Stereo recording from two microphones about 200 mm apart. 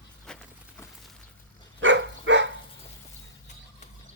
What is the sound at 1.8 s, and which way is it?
Dog, 65° right (ahead or behind).